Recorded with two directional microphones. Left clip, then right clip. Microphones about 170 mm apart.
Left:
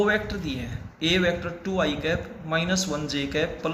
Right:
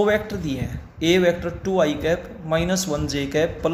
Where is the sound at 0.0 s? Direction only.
45° right (ahead or behind).